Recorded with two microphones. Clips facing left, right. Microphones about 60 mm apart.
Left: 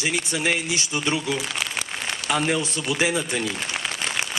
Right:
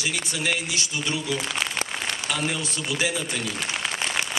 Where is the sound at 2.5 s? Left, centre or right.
Left.